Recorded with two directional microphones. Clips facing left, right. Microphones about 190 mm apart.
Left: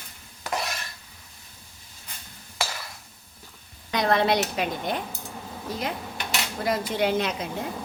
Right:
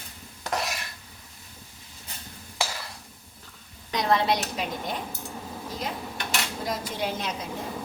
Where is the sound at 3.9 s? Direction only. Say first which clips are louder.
Left 2 dB; 60° left (ahead or behind).